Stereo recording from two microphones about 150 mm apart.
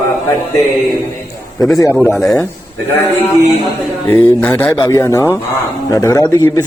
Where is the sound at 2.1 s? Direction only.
5° left (ahead or behind).